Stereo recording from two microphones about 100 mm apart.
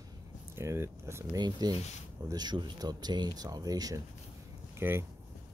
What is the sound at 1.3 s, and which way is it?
Speech, 45° right (ahead or behind).